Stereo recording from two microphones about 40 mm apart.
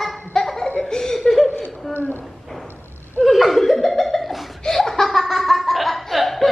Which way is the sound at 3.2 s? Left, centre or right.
Centre.